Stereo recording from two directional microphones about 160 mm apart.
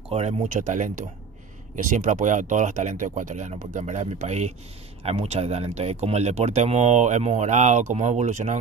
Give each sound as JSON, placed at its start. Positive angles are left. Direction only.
{"t": 0.1, "sound": "speech", "side_deg": -45}